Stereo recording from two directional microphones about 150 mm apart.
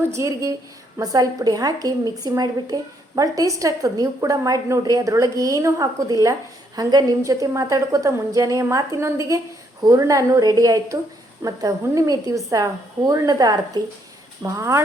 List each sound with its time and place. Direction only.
0.1 s a woman's voice: 20° right (ahead or behind)